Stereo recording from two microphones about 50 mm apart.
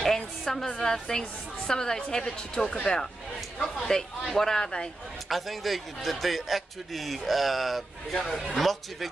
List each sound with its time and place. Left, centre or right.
0.0 s a sound: centre
0.7 s a woman's voice: centre
4.3 s a man's voice: centre
4.6 s a woman's voice: centre
5.3 s a man's voice: centre